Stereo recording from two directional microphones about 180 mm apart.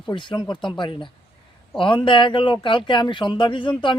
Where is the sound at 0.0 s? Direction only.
25° left (ahead or behind).